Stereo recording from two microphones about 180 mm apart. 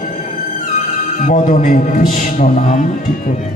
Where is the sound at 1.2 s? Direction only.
45° left (ahead or behind).